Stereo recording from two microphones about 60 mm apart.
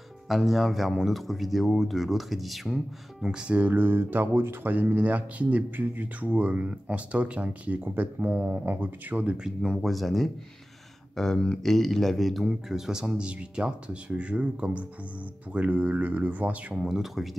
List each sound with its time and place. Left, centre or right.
0.3 s speech: centre
3.3 s a man's voice: centre
3.7 s speech: right
9.4 s a man's voice: centre; by 16.7 s right
16.7 s speech: centre